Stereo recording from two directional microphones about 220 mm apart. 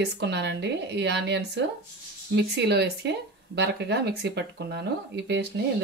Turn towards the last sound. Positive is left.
turn(degrees=-50)  # may be behind; listen again after turning